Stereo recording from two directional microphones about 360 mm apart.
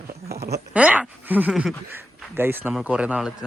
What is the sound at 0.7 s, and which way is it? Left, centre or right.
Speech, centre.